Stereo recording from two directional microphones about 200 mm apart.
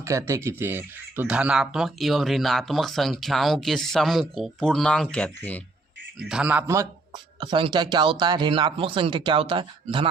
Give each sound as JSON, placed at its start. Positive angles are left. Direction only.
{"t": 0.0, "sound": "speech", "side_deg": -15}
{"t": 6.1, "sound": "a man's voice", "side_deg": -5}
{"t": 7.3, "sound": "speech", "side_deg": -25}